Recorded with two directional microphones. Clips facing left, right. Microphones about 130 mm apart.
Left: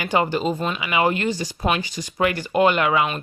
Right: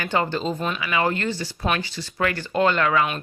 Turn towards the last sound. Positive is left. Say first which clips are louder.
# left 2 dB
turn(degrees=15)  # may be behind; listen again after turning